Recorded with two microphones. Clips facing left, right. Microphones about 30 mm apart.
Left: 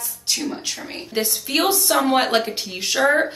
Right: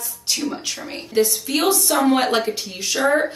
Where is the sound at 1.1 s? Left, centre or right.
Left.